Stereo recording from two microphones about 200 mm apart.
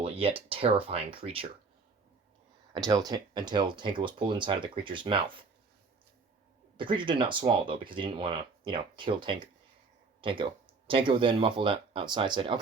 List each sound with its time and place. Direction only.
0.0 s speech: 30° right (ahead or behind)
2.7 s speech: 20° right (ahead or behind)
6.7 s speech: 25° right (ahead or behind)